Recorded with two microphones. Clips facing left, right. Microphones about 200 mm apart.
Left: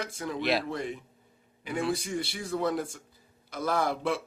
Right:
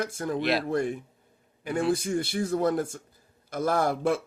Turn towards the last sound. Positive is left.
turn(degrees=-45)  # may be behind; listen again after turning